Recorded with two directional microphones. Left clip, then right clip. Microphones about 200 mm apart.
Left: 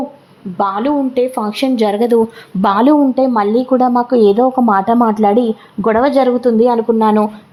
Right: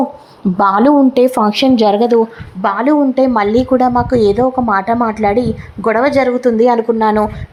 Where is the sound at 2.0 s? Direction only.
15° left (ahead or behind).